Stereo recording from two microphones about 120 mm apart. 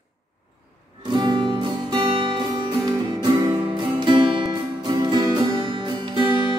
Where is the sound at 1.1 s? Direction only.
40° right (ahead or behind).